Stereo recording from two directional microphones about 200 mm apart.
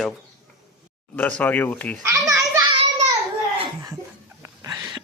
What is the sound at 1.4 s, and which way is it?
Speech, 10° left (ahead or behind).